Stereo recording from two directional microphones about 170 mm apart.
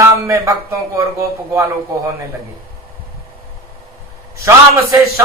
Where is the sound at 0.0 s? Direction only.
15° right (ahead or behind).